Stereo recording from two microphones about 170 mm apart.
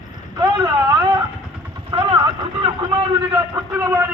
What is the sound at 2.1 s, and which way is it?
Vehicle, 30° right (ahead or behind).